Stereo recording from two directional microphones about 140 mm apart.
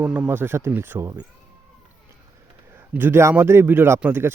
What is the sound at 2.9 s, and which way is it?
Speech, 15° right (ahead or behind).